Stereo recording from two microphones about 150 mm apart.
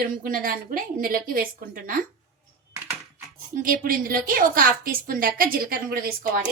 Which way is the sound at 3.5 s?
70° right (ahead or behind).